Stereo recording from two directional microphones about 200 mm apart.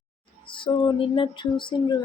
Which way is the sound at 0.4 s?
25° left (ahead or behind).